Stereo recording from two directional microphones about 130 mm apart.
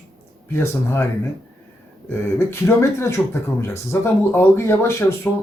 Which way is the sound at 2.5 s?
20° left (ahead or behind).